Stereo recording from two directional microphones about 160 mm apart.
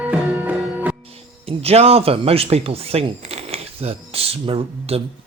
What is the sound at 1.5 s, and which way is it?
Speech, 40° right (ahead or behind).